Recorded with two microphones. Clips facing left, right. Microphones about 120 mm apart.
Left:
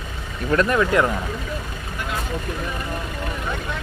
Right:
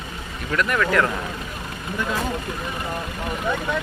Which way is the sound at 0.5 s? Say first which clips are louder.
Left 3 dB; 30° left (ahead or behind).